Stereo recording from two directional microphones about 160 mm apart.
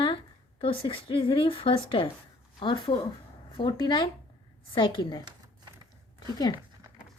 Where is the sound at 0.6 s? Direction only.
35° left (ahead or behind).